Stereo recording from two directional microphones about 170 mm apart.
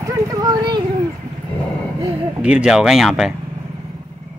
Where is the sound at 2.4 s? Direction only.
5° right (ahead or behind).